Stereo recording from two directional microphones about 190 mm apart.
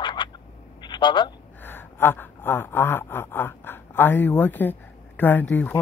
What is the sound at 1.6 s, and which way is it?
Speech, 10° left (ahead or behind).